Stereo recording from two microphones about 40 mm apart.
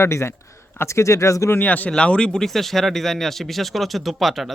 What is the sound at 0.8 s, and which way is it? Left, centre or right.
Speech, left.